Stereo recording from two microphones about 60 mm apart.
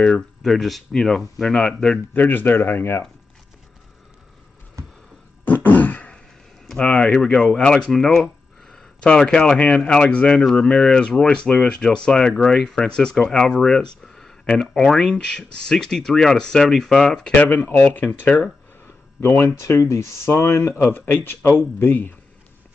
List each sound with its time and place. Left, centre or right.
0.4 s speech: centre
2.1 s speech: left
5.4 s beatboxing: left
6.7 s speech: centre
17.3 s speech: left
19.2 s speech: left
19.6 s speech: left
20.7 s speech: left